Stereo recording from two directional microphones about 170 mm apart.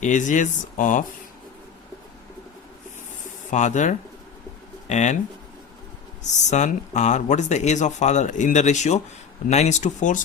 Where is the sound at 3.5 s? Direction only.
45° left (ahead or behind).